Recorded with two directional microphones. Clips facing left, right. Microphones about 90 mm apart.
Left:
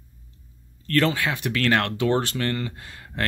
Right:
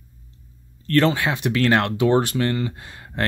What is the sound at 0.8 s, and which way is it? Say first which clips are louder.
Speech: right 3 dB; 30° right (ahead or behind).